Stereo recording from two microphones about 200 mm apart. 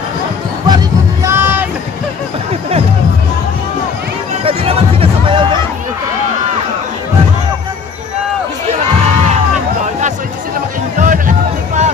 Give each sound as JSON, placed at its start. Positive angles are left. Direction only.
{"t": 0.7, "sound": "music", "side_deg": -15}
{"t": 4.5, "sound": "music", "side_deg": -30}
{"t": 11.0, "sound": "music", "side_deg": -40}